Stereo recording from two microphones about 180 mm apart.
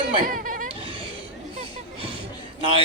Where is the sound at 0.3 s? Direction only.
50° right (ahead or behind).